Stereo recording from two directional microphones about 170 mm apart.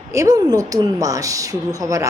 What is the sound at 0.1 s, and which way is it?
A woman's voice, 20° right (ahead or behind).